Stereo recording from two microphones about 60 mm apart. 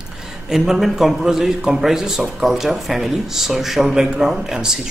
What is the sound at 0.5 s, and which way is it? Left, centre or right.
A man's voice, centre.